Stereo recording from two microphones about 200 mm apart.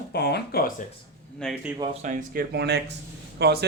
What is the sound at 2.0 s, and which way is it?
Speech, 45° right (ahead or behind).